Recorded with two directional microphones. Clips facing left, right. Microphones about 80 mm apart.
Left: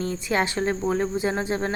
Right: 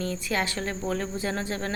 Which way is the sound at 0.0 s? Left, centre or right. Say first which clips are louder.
Left 4 dB; left.